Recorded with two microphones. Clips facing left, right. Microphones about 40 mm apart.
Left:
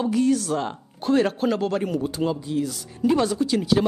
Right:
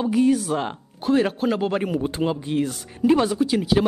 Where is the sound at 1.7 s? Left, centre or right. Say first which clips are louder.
Right 1 dB; right.